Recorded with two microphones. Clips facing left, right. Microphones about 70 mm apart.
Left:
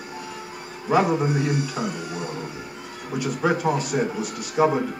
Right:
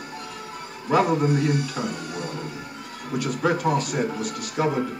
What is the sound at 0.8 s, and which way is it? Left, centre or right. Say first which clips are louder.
Speech: even; centre.